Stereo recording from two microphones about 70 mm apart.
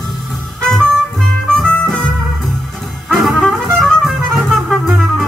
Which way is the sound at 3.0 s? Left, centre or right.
Centre.